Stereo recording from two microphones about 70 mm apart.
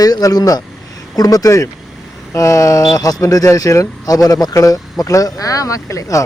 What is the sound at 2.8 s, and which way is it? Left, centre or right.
Speech, left.